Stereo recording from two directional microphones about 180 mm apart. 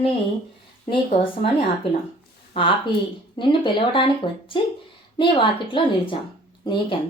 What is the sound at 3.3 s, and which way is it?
Speech, 25° left (ahead or behind).